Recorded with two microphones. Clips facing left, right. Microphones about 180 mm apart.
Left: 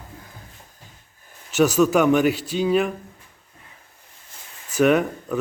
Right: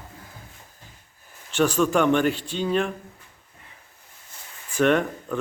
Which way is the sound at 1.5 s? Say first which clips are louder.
Left 4 dB; 10° left (ahead or behind).